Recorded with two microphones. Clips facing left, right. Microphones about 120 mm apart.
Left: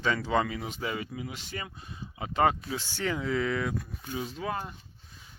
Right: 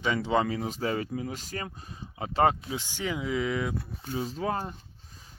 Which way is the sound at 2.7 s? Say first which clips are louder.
Left 1 dB; 15° right (ahead or behind).